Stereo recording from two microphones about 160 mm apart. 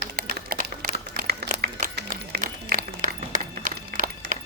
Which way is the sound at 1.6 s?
85° right.